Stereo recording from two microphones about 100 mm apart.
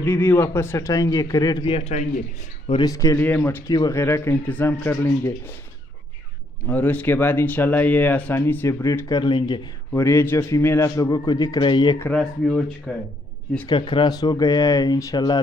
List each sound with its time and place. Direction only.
0.0 s a man's voice: 25° left (ahead or behind)
1.6 s a man's voice: 80° left
2.8 s a man's voice: 35° left (ahead or behind)
3.2 s speech: 20° left (ahead or behind)
6.6 s speech: 15° left (ahead or behind)
8.6 s speech: 30° left (ahead or behind)
9.1 s speech: 45° left (ahead or behind)
9.9 s a man's voice: 25° left (ahead or behind); by 12.0 s 50° left (ahead or behind)
12.1 s speech: 10° left (ahead or behind)
13.7 s a man's voice: 55° left (ahead or behind); by 15.2 s 35° left (ahead or behind)